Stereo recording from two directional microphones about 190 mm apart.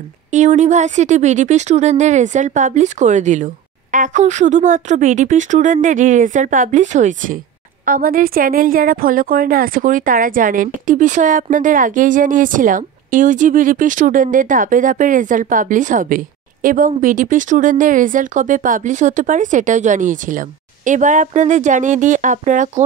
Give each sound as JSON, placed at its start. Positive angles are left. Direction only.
{"t": 0.3, "sound": "speech", "side_deg": -40}